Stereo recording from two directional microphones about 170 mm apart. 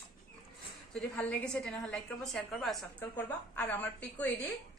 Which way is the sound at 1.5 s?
5° left (ahead or behind).